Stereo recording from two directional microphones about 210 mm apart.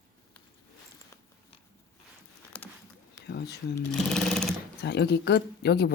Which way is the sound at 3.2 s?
50° left (ahead or behind).